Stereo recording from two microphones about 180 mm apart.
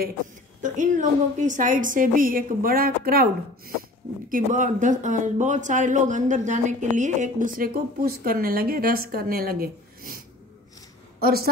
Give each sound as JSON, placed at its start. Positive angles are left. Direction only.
{"t": 0.6, "sound": "speech", "side_deg": -45}
{"t": 4.3, "sound": "a woman's voice", "side_deg": -45}